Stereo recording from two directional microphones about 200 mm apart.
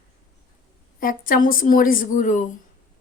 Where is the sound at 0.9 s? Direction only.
45° left (ahead or behind).